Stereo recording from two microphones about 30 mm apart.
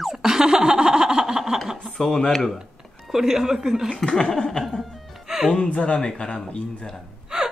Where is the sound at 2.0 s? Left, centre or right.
Centre.